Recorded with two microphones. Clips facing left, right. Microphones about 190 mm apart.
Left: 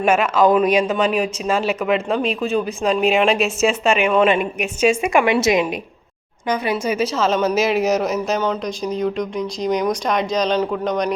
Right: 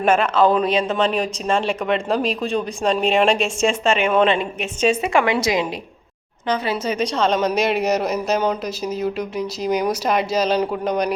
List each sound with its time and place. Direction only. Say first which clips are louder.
0.0 s a woman's voice: left 1 dB; 10° left (ahead or behind)
6.5 s a woman's voice: left 1 dB; 10° left (ahead or behind); by 11.1 s 5° right (ahead or behind)